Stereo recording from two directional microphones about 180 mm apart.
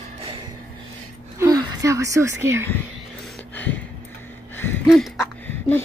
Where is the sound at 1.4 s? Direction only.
15° right (ahead or behind).